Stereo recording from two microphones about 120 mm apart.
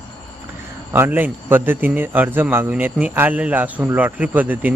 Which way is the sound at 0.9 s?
15° right (ahead or behind).